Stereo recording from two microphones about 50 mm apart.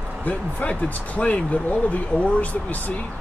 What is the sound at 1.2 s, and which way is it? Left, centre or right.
Speech, left.